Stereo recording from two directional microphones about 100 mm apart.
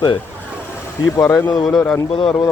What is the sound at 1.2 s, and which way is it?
Speech, 30° left (ahead or behind).